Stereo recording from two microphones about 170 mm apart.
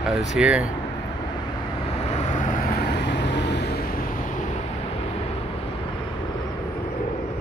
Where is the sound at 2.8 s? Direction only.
80° left.